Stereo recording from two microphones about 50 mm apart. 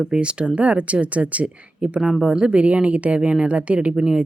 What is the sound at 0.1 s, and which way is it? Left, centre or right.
A woman's voice, centre.